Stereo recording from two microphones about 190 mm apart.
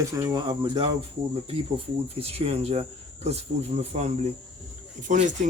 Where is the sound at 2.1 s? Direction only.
30° right (ahead or behind).